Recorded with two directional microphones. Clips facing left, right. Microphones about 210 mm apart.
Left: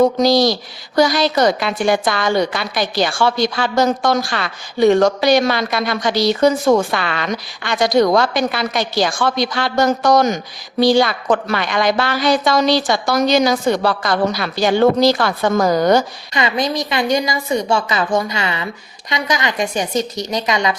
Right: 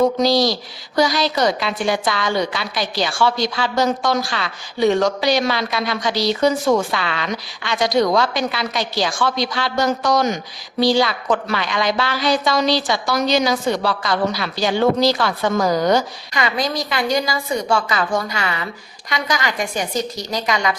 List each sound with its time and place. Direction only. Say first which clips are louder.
0.2 s a woman's voice: left 3 dB; 50° left (ahead or behind)
16.3 s a woman's voice: left 3 dB; 20° left (ahead or behind)